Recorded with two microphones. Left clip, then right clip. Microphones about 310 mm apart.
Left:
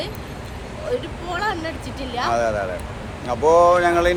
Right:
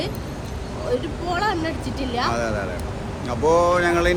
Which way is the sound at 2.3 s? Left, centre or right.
Centre.